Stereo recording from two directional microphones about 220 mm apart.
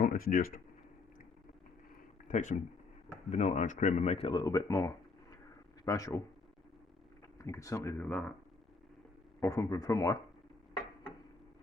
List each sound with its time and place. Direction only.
0.0 s speech: 40° left (ahead or behind)
2.2 s speech: 35° left (ahead or behind); by 6.2 s 15° left (ahead or behind)
7.3 s speech: 15° left (ahead or behind)
9.4 s speech: 15° left (ahead or behind)